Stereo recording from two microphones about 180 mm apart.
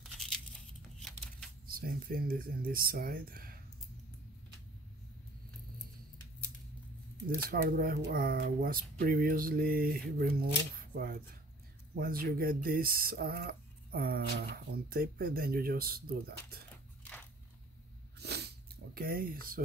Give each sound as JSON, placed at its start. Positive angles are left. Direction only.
{"t": 1.7, "sound": "speech", "side_deg": -55}
{"t": 7.2, "sound": "speech", "side_deg": -55}
{"t": 18.2, "sound": "snort", "side_deg": -65}
{"t": 18.9, "sound": "speech", "side_deg": -55}